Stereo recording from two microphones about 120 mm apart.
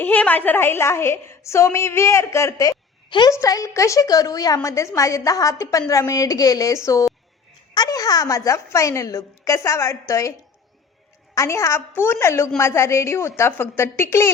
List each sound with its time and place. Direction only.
0.0 s a woman's voice: 15° left (ahead or behind)
3.1 s a woman's voice: 40° left (ahead or behind)
3.3 s a woman's voice: 25° left (ahead or behind)
11.3 s a woman's voice: 25° left (ahead or behind)